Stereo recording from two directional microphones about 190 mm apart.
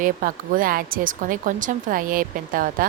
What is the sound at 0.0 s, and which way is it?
Speech, 45° right (ahead or behind).